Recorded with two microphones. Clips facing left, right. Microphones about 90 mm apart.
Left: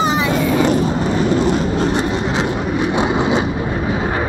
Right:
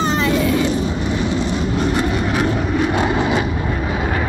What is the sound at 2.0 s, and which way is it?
Vehicle, 30° left (ahead or behind).